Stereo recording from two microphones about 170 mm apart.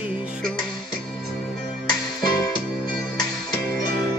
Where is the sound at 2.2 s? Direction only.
25° left (ahead or behind).